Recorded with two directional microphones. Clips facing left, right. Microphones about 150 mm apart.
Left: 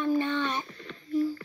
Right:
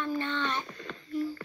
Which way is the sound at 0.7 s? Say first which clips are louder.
Right 2 dB; 90° right.